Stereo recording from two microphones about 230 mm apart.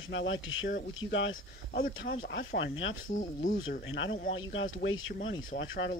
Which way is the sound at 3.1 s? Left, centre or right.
Left.